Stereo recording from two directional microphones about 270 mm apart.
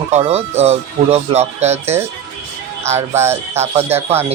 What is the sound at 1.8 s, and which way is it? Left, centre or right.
Music, centre.